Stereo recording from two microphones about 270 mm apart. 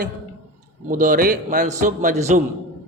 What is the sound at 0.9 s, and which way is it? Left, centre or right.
A man's voice, right.